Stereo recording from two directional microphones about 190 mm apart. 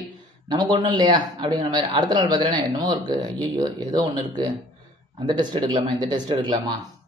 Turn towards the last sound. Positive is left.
turn(degrees=-25)  # may be behind; listen again after turning